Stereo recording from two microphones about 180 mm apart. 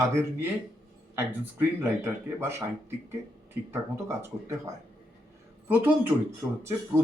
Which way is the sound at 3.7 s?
15° right (ahead or behind).